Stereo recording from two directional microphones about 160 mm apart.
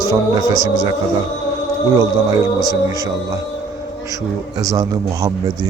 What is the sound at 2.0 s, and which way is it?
Speech, 20° right (ahead or behind).